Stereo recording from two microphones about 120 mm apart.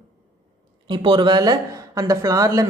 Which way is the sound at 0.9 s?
40° right (ahead or behind).